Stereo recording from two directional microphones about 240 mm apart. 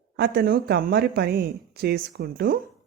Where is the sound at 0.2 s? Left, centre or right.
Right.